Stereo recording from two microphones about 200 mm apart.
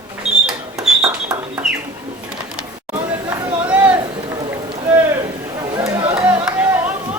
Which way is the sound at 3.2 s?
10° right (ahead or behind).